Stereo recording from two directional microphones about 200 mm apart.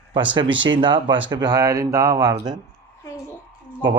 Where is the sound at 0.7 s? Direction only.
25° right (ahead or behind).